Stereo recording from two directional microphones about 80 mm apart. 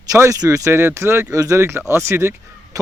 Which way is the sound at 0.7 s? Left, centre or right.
Right.